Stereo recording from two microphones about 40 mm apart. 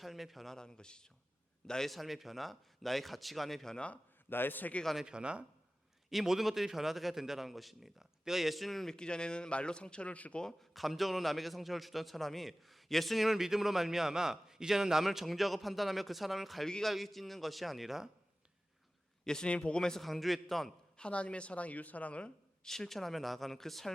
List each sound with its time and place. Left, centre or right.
0.0 s a man's voice: centre
0.5 s a man's voice: centre
1.9 s a man's voice: centre
4.3 s a man's voice: left
5.0 s speech: right
6.1 s a man's voice: centre
9.0 s a man's voice: left
10.6 s a man's voice: centre
19.2 s a man's voice: centre
19.5 s a man's voice: left
20.0 s a man's voice: centre
21.0 s a woman's voice: left
22.6 s speech: centre